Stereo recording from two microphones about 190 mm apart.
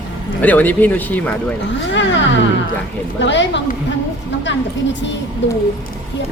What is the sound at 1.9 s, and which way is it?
Speech, 75° left (ahead or behind).